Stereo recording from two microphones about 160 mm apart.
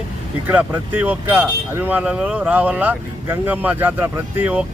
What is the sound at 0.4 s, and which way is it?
Speech, 10° right (ahead or behind).